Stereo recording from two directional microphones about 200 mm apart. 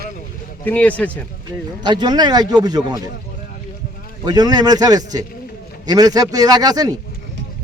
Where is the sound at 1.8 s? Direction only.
20° right (ahead or behind).